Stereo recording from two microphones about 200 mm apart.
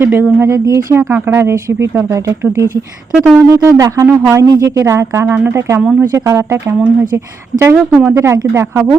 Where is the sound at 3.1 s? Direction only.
5° right (ahead or behind).